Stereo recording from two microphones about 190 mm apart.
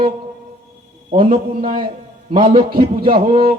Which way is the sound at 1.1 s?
30° right (ahead or behind).